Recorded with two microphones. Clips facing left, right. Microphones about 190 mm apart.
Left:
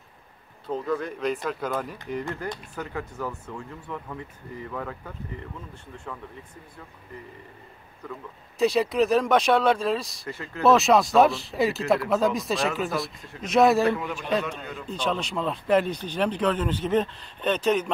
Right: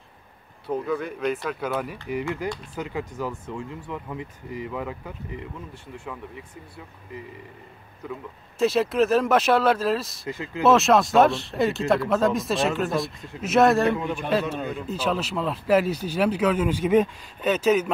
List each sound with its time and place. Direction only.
0.7 s speech: 5° right (ahead or behind)
8.5 s speech: centre (ahead or behind)
10.2 s speech: 20° right (ahead or behind)
10.6 s speech: centre (ahead or behind)